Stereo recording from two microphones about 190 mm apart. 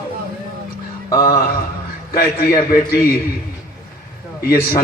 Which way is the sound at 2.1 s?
50° left (ahead or behind).